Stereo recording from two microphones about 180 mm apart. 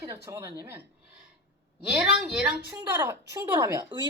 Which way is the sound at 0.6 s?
10° right (ahead or behind).